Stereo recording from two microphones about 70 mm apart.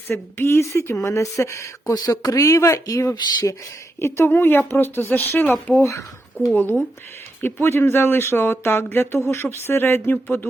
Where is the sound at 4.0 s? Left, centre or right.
Left.